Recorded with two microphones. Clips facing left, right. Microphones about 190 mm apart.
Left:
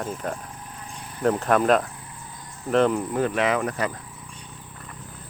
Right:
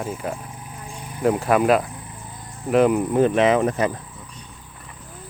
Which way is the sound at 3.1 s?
20° right (ahead or behind).